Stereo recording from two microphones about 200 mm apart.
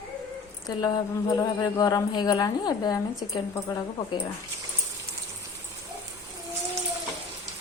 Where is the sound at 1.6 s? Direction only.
20° left (ahead or behind).